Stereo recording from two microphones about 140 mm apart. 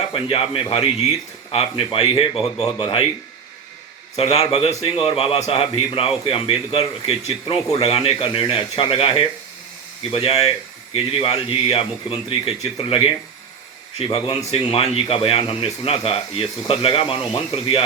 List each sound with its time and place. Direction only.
0.1 s a man's voice: 40° left (ahead or behind)
4.2 s a man's voice: 45° left (ahead or behind)
14.5 s speech: 40° left (ahead or behind)